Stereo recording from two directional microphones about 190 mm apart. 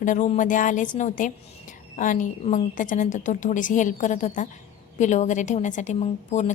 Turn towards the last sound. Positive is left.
turn(degrees=40)  # may be behind; listen again after turning